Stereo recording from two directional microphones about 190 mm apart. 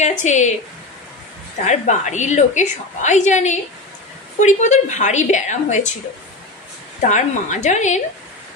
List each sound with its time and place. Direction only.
0.0 s a woman's voice: 40° left (ahead or behind)
1.7 s a woman's voice: 40° left (ahead or behind)
7.0 s a woman's voice: 40° left (ahead or behind)